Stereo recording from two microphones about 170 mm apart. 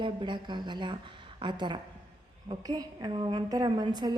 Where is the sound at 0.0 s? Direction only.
30° right (ahead or behind).